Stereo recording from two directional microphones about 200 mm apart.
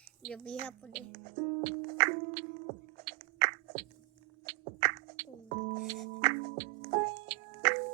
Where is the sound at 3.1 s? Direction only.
25° right (ahead or behind).